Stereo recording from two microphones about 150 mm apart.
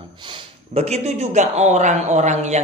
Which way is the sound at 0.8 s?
45° right (ahead or behind).